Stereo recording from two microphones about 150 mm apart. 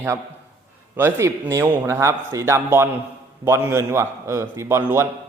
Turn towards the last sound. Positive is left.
turn(degrees=-15)  # may be behind; listen again after turning